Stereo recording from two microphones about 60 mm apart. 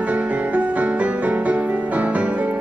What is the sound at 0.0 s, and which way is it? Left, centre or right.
Music, right.